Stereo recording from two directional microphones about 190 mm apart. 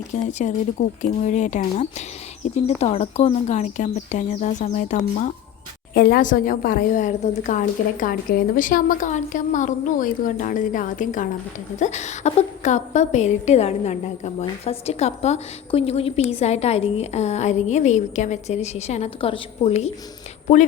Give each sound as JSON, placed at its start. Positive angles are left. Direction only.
{"t": 0.3, "sound": "a woman's voice", "side_deg": 40}
{"t": 5.9, "sound": "a woman's voice", "side_deg": 55}